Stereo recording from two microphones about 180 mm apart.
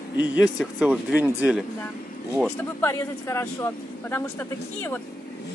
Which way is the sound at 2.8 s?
15° left (ahead or behind).